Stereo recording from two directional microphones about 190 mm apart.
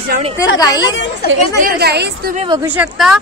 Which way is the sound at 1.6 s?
55° right (ahead or behind).